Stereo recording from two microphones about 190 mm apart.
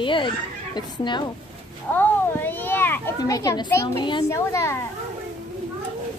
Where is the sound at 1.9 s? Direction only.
10° left (ahead or behind).